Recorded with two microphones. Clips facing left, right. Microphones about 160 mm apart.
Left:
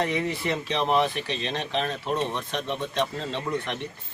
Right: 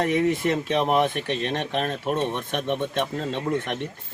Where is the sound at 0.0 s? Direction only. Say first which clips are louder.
Right 5 dB; 50° right (ahead or behind).